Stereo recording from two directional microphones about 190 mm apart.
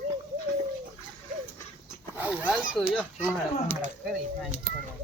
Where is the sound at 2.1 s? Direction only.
10° right (ahead or behind).